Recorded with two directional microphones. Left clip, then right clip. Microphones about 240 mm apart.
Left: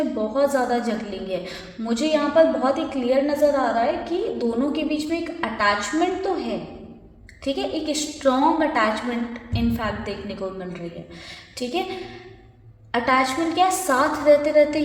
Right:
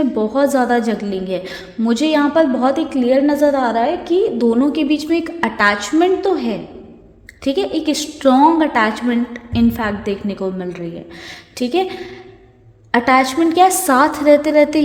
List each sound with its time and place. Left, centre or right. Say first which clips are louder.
0.2 s a woman's voice: right 5 dB; right
12.9 s a woman's voice: right 6 dB; right